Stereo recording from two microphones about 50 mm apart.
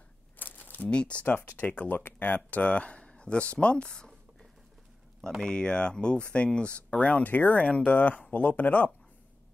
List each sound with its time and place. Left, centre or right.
0.4 s a sound: left
0.8 s speech: left
1.2 s speech: left
1.6 s speech: left
5.4 s speech: centre; by 8.9 s left